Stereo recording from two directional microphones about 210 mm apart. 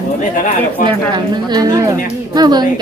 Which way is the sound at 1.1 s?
20° right (ahead or behind).